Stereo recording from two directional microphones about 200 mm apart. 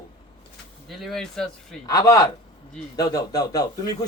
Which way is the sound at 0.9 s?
Centre (ahead or behind).